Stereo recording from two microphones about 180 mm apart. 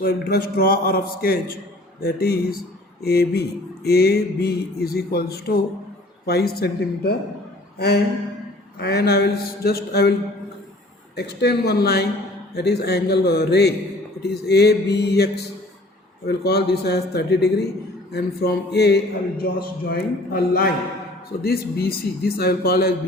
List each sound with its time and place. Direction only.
0.0 s a man's voice: 55° left (ahead or behind)
8.8 s a man's voice: 60° left (ahead or behind)